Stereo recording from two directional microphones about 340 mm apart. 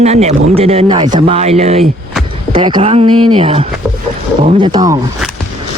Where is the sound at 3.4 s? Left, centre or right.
Centre.